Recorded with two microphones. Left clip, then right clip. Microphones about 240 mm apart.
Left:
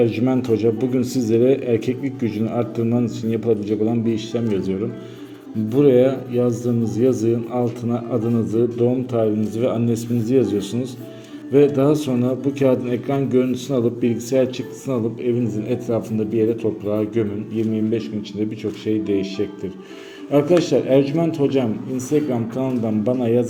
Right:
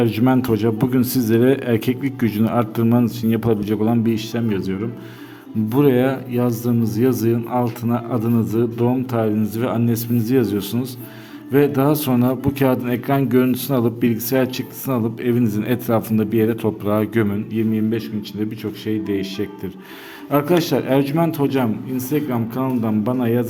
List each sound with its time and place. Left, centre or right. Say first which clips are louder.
0.0 s a man's voice: right 1 dB; right